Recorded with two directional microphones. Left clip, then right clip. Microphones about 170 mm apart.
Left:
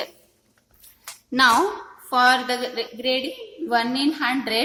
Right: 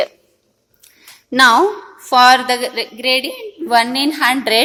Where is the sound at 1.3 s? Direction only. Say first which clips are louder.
Right 7 dB; 20° right (ahead or behind).